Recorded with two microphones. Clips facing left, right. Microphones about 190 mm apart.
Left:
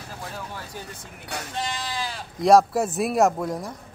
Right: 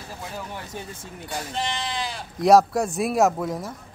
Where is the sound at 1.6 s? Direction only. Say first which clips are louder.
Right 1 dB; 25° right (ahead or behind).